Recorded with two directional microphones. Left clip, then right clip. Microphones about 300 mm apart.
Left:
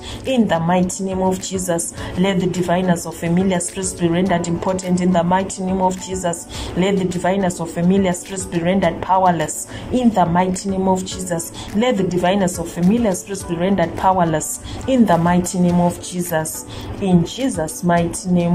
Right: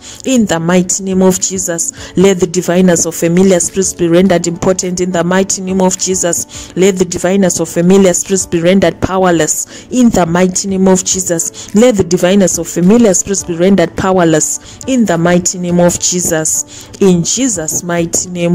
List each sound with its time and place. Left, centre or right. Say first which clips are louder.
0.2 s a woman's voice: right 5 dB; right